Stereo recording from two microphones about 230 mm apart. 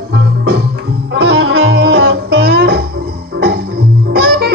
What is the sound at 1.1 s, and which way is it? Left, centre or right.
Music, right.